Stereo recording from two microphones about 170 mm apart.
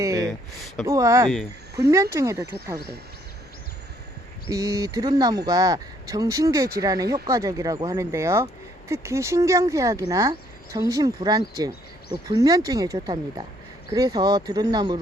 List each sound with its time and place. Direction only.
0.0 s a sound: 20° right (ahead or behind)
0.3 s speech: centre (ahead or behind)
0.9 s speech: 20° right (ahead or behind)
2.7 s speech: 70° right (ahead or behind)
4.4 s speech: 20° right (ahead or behind)
11.7 s a sound: 70° left (ahead or behind)
12.3 s speech: 20° right (ahead or behind)